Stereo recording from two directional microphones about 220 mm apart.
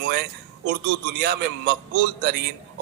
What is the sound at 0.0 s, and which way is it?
A man's voice, 50° right (ahead or behind).